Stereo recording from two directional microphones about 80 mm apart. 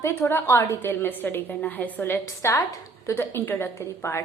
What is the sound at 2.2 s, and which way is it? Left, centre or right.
A woman's voice, left.